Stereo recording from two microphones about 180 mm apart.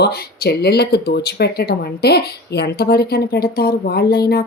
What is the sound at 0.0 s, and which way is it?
Speech, 60° left (ahead or behind).